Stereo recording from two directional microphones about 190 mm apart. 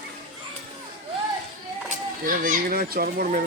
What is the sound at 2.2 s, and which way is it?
A child's voice, 45° right (ahead or behind).